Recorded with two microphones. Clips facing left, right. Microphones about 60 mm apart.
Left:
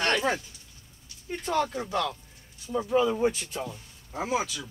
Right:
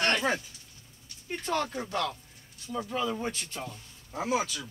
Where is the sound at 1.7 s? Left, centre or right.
Centre.